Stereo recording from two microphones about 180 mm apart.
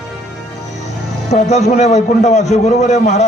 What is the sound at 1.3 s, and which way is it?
A man's voice, 40° left (ahead or behind).